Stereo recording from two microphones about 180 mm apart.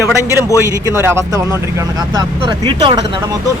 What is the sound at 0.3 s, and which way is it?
A man's voice, 15° right (ahead or behind).